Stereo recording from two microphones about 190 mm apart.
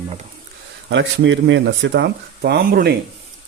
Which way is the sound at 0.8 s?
70° right (ahead or behind).